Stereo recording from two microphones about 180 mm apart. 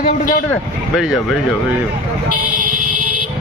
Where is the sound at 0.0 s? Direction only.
45° left (ahead or behind).